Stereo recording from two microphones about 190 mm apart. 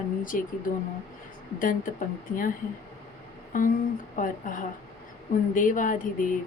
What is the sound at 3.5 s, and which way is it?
A woman's voice, 45° left (ahead or behind).